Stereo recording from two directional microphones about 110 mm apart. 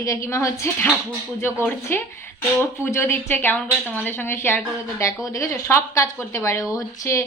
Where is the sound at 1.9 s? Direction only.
20° left (ahead or behind).